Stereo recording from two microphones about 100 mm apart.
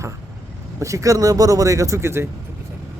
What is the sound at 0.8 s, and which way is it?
Speech, 30° right (ahead or behind).